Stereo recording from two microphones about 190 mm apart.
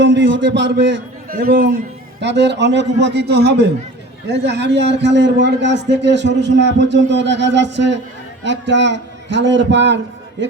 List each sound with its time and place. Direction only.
0.0 s a man's voice: 70° right (ahead or behind)
1.3 s a man's voice: 50° right (ahead or behind)
2.2 s a man's voice: 65° right (ahead or behind)